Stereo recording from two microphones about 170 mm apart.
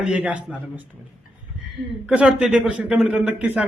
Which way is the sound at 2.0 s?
5° right (ahead or behind).